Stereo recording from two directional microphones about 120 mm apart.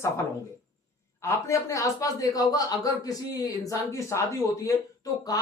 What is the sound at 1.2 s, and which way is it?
Speech, 25° left (ahead or behind).